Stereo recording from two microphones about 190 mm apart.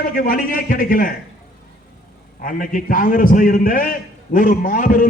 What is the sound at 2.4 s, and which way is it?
A man's voice, 45° left (ahead or behind).